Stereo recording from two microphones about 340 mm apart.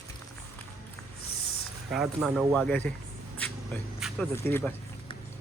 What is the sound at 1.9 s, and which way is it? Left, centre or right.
Speech, centre.